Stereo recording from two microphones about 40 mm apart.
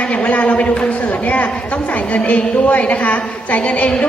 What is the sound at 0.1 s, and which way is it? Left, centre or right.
Speech, left.